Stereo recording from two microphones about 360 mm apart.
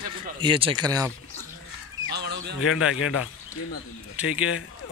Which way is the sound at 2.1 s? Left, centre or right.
Right.